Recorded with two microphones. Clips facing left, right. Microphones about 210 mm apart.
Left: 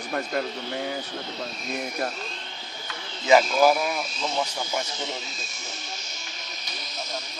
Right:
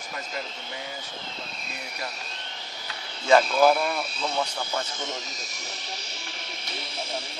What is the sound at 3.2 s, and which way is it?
Speech, 10° left (ahead or behind).